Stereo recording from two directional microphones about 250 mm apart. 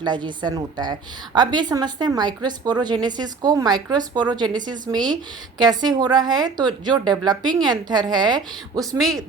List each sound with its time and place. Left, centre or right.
0.0 s a woman's voice: centre